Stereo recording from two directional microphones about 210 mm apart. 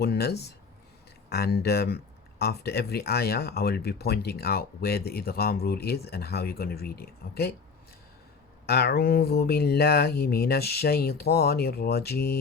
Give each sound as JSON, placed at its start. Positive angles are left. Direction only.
{"t": 0.0, "sound": "speech", "side_deg": 50}
{"t": 8.6, "sound": "speech", "side_deg": 50}